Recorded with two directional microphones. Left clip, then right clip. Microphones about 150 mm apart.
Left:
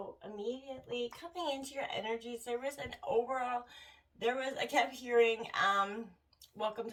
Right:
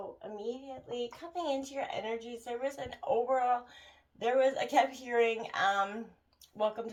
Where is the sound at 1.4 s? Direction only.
40° right (ahead or behind).